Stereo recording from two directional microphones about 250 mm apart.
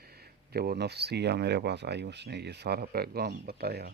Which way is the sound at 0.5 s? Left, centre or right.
Right.